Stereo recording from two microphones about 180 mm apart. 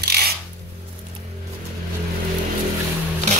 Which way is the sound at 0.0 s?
60° right (ahead or behind).